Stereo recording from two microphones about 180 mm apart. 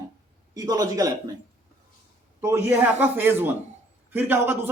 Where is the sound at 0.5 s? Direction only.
20° right (ahead or behind).